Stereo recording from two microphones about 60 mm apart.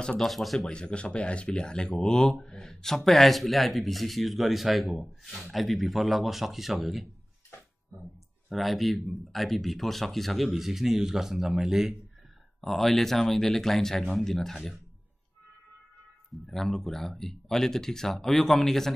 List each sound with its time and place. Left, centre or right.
0.2 s speech: centre
0.7 s speech: centre
8.5 s speech: centre
16.4 s speech: centre